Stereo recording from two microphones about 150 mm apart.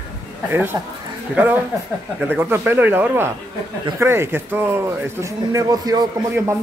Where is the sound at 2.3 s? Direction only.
15° right (ahead or behind).